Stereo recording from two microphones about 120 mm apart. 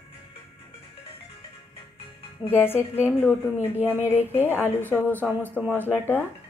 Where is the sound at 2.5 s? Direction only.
20° left (ahead or behind).